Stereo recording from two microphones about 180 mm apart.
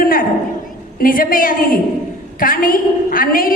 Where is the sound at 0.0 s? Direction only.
50° left (ahead or behind).